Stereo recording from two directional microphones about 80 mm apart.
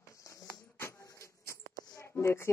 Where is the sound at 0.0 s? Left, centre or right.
Left.